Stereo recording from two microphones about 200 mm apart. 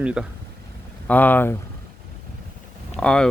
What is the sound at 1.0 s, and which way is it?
Speech, 10° left (ahead or behind).